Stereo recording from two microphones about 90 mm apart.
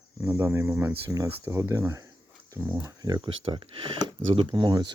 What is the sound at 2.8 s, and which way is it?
Speech, 50° right (ahead or behind).